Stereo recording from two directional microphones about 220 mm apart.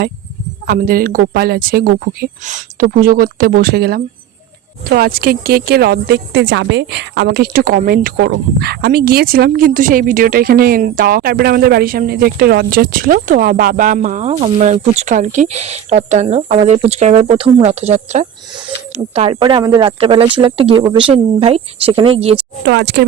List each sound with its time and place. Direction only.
0.7 s speech: 40° right (ahead or behind)
22.6 s speech: 50° right (ahead or behind)